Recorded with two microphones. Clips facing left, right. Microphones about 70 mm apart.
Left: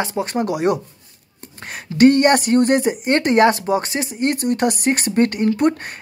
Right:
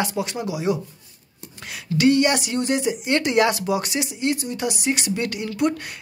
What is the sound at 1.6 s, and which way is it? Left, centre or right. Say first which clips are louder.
Speech: left 6 dB; left.